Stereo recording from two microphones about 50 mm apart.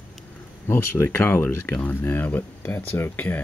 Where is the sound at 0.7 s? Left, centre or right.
Left.